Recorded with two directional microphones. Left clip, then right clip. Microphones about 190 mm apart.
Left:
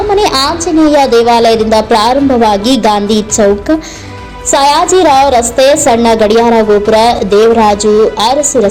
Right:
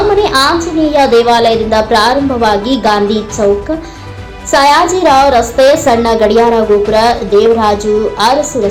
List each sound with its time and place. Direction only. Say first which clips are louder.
0.2 s a woman's voice: right 1 dB; 40° left (ahead or behind)
4.5 s a woman's voice: left 1 dB; 35° left (ahead or behind)